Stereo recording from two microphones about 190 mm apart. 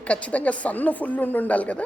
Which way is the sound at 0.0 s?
5° left (ahead or behind).